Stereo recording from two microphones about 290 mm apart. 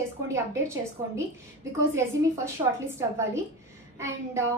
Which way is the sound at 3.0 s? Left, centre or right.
Centre.